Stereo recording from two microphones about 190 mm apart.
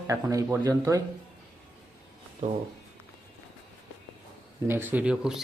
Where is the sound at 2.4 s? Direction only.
40° right (ahead or behind).